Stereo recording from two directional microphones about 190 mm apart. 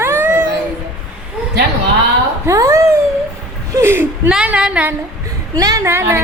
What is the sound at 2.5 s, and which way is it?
A woman's voice, 15° right (ahead or behind).